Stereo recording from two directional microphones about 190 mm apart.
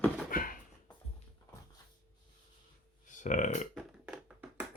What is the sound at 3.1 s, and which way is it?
Speech, 40° left (ahead or behind).